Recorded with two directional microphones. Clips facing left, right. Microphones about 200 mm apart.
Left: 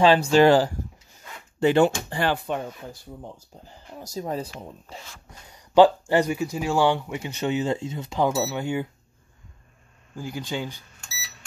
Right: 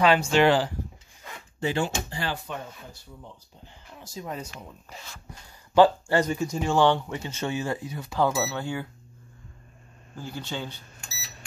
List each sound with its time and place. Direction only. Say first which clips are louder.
0.3 s speech: left 4 dB; 40° left (ahead or behind)
1.6 s speech: left 9 dB; 60° left (ahead or behind)
3.6 s speech: left 6 dB; 40° left (ahead or behind)
5.5 s speech: left 3 dB; 15° left (ahead or behind)
6.4 s speech: even; 5° left (ahead or behind)
10.1 s speech: left 4 dB; 10° left (ahead or behind)